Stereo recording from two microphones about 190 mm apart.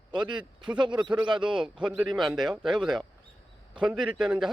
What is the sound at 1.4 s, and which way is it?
Speech, 5° right (ahead or behind).